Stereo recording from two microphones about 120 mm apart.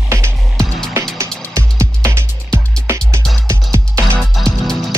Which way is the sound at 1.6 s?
25° right (ahead or behind).